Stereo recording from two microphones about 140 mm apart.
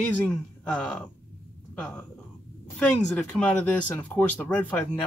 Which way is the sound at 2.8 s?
5° left (ahead or behind).